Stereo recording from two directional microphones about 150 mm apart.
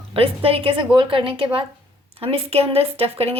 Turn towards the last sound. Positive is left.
turn(degrees=-40)  # may be behind; listen again after turning